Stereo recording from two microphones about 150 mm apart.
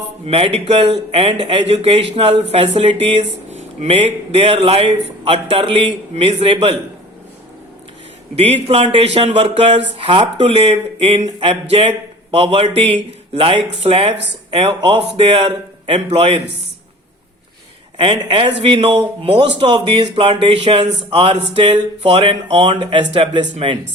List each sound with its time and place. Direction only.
0.3 s a man's voice: 40° right (ahead or behind)
8.4 s a man's voice: 40° right (ahead or behind)
17.9 s a man's voice: 35° right (ahead or behind)